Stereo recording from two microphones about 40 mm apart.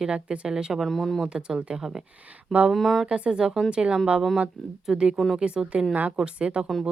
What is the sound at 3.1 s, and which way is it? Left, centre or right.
A woman's voice, right.